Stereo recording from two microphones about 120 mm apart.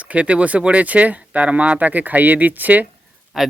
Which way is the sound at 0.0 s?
10° right (ahead or behind).